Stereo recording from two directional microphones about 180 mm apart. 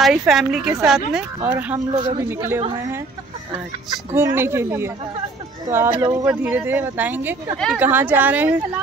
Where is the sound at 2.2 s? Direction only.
15° right (ahead or behind).